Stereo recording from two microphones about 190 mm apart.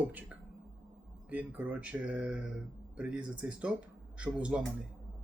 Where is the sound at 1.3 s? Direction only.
10° right (ahead or behind).